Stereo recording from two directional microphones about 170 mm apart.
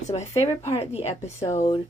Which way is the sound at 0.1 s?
30° left (ahead or behind).